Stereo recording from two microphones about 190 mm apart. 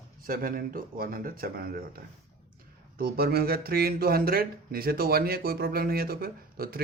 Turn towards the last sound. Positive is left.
turn(degrees=-50)  # may be behind; listen again after turning